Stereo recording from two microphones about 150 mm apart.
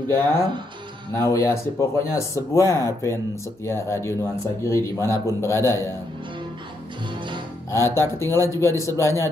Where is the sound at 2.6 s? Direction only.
25° right (ahead or behind).